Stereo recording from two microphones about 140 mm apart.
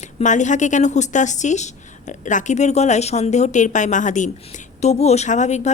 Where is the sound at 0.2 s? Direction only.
60° left (ahead or behind).